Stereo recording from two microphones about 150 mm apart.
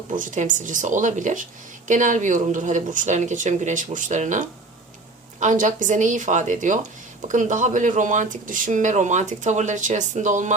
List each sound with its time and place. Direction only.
0.1 s speech: 60° right (ahead or behind)